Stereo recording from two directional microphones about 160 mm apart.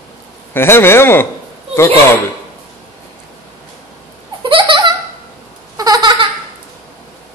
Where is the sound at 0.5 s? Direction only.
15° left (ahead or behind).